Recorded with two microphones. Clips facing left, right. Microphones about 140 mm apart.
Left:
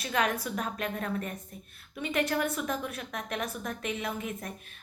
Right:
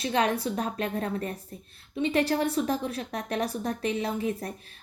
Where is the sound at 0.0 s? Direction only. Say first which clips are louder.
Right 4 dB; 30° right (ahead or behind).